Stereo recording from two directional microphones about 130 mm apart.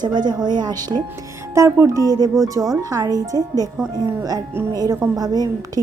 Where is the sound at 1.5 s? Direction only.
25° right (ahead or behind).